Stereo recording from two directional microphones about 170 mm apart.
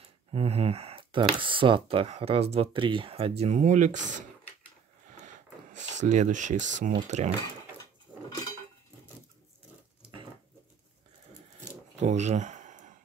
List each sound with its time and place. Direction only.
0.0 s speech: 35° right (ahead or behind)
5.2 s speech: 45° right (ahead or behind)
12.0 s a sound: 40° right (ahead or behind)